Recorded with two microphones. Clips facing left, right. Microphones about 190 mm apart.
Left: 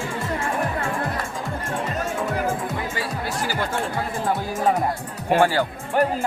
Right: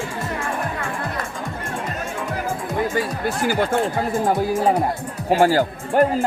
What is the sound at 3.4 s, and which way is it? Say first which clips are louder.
Speech: right 7 dB; 50° right (ahead or behind).